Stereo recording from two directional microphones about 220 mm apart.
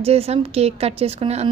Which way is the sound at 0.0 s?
25° right (ahead or behind).